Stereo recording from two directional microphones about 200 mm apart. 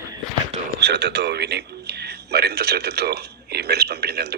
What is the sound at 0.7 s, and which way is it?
A man's voice, 55° right (ahead or behind).